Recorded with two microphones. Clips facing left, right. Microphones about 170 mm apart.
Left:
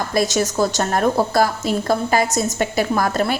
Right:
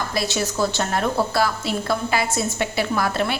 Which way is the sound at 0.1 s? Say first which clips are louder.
Left 5 dB; 45° left (ahead or behind).